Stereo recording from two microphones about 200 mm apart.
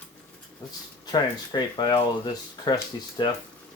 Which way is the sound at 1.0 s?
20° left (ahead or behind).